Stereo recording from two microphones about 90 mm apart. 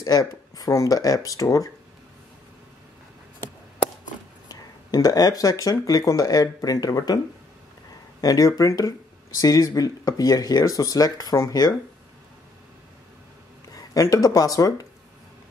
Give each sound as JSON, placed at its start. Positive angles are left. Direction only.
{"t": 0.0, "sound": "speech", "side_deg": 40}
{"t": 4.5, "sound": "speech", "side_deg": 45}
{"t": 8.2, "sound": "speech", "side_deg": 40}
{"t": 13.7, "sound": "speech", "side_deg": 40}